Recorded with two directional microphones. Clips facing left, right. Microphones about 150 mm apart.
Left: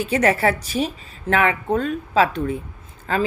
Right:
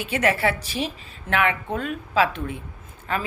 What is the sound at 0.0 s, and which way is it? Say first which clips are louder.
Speech: left 4 dB; 40° left (ahead or behind).